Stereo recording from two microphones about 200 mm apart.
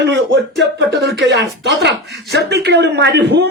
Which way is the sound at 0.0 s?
60° right (ahead or behind).